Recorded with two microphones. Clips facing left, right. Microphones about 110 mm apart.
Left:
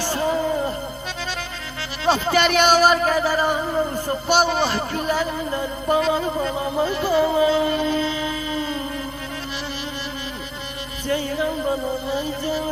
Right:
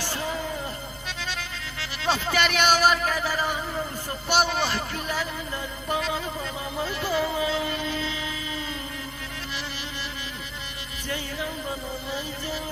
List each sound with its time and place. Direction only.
0.1 s music: 35° left (ahead or behind)
2.0 s speech: 35° left (ahead or behind)
11.1 s speech: 40° left (ahead or behind)